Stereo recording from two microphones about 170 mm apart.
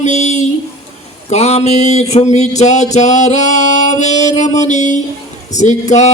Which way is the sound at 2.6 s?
45° left (ahead or behind).